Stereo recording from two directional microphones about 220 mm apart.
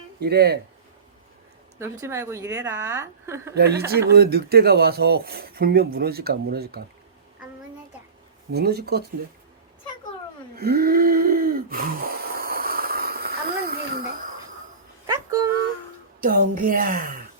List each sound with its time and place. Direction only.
0.2 s speech: 45° right (ahead or behind)
1.8 s a woman's voice: 15° right (ahead or behind)
3.5 s speech: 45° right (ahead or behind)
8.5 s speech: 45° right (ahead or behind)
10.5 s a sound: 45° right (ahead or behind)
15.0 s a sound: 15° right (ahead or behind)
16.2 s a woman's voice: 40° right (ahead or behind)